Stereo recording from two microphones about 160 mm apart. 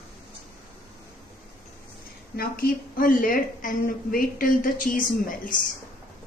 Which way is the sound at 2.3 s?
65° left (ahead or behind).